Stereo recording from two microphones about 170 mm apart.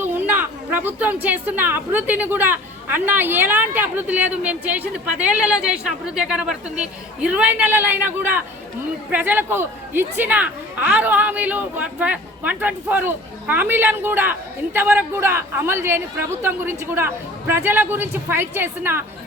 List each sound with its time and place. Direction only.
0.0 s speech: 10° right (ahead or behind)